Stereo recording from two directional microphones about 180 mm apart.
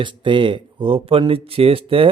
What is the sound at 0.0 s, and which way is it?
Speech, 25° right (ahead or behind).